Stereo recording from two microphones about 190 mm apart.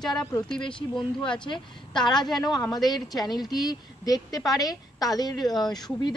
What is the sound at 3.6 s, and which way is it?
A woman's voice, 20° left (ahead or behind).